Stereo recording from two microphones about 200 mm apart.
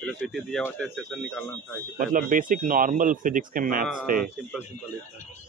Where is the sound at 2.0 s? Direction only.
45° right (ahead or behind).